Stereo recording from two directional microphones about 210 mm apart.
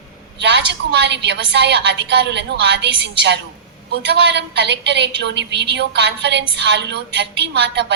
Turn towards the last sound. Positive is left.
turn(degrees=-55)  # may be behind; listen again after turning